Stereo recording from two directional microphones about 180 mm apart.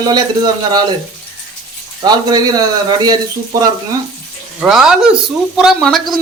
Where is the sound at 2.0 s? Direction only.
20° right (ahead or behind).